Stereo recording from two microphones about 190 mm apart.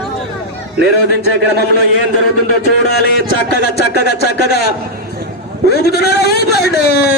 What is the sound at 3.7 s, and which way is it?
Speech, 60° left (ahead or behind).